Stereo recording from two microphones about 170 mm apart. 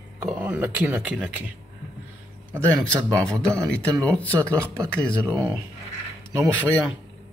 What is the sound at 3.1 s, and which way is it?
Speech, 15° right (ahead or behind).